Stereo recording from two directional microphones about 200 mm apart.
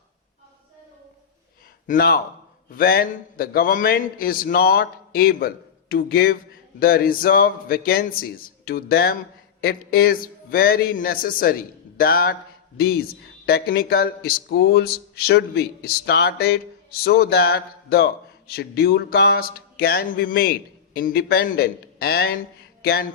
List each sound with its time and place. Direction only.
1.9 s speech: 45° left (ahead or behind)